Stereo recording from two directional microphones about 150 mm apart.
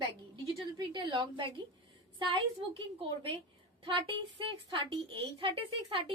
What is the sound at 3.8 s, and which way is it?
A child's voice, 35° right (ahead or behind).